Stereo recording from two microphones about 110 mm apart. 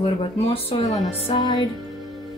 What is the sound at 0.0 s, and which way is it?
Speech, 60° left (ahead or behind).